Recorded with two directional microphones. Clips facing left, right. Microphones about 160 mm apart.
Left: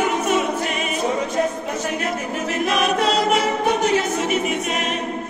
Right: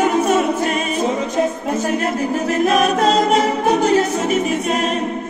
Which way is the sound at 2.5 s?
45° right (ahead or behind).